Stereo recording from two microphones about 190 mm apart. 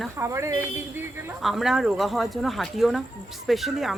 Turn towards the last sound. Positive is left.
turn(degrees=0)  # may be behind; listen again after turning